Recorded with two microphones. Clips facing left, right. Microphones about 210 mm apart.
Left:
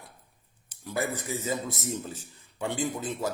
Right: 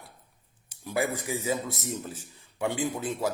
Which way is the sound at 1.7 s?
Centre (ahead or behind).